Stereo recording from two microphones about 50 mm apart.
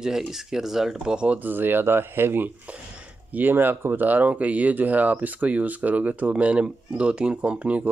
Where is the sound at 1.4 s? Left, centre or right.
Right.